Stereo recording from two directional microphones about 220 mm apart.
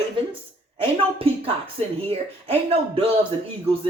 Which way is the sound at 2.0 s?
25° right (ahead or behind).